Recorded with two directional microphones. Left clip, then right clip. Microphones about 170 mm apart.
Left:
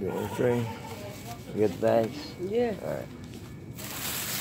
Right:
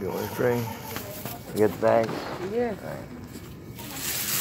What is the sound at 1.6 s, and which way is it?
Speech, 10° left (ahead or behind).